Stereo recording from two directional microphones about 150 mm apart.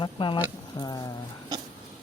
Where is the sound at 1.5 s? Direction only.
25° right (ahead or behind).